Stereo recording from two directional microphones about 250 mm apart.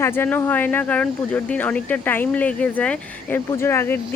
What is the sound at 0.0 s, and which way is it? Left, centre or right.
Speech, centre.